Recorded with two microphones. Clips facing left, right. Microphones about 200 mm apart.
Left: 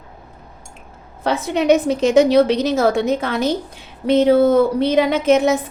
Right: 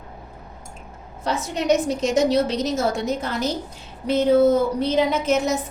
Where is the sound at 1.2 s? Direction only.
60° left (ahead or behind).